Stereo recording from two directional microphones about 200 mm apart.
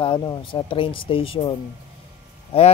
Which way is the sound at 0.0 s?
25° left (ahead or behind).